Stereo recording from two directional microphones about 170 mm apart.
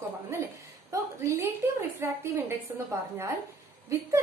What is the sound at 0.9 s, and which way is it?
A woman's voice, 15° right (ahead or behind).